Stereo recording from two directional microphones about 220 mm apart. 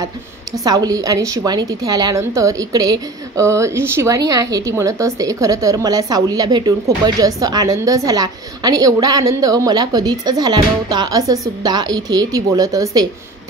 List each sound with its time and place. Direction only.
0.7 s a woman's voice: 15° right (ahead or behind)